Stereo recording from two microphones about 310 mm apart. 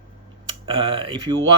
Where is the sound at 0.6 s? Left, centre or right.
Centre.